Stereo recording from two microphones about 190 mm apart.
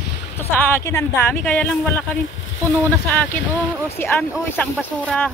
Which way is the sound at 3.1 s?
10° left (ahead or behind).